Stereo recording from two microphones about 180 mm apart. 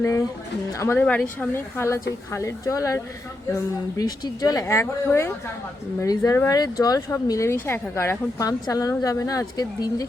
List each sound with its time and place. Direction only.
0.7 s speech: 15° left (ahead or behind)